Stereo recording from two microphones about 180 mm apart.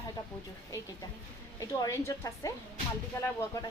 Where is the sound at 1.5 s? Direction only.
15° left (ahead or behind).